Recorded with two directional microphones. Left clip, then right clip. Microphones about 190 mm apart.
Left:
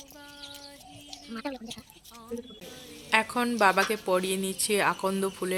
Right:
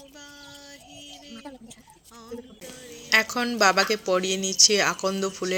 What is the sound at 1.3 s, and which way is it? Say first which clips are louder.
Sheep: left 9 dB; 25° left (ahead or behind).